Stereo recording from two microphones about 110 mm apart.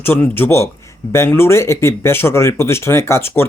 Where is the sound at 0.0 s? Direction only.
20° left (ahead or behind).